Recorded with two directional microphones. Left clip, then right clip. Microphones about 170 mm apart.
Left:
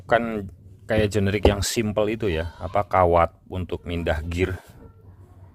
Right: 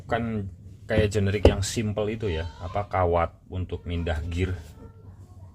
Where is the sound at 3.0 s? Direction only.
40° left (ahead or behind).